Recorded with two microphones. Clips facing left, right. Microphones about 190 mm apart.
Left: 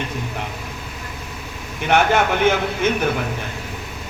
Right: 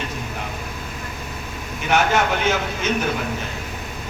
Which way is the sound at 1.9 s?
55° left (ahead or behind).